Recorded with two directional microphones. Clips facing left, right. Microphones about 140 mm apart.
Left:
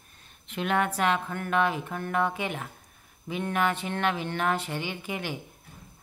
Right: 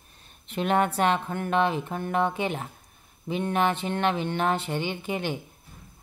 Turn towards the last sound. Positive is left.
turn(degrees=-25)  # may be behind; listen again after turning